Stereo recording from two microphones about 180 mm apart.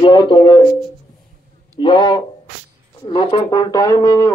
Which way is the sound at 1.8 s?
25° left (ahead or behind).